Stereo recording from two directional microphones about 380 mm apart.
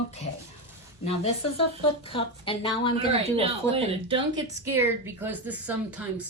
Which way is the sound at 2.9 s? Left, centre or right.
Centre.